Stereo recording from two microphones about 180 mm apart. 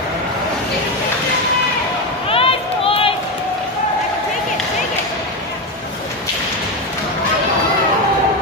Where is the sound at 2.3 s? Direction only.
30° left (ahead or behind).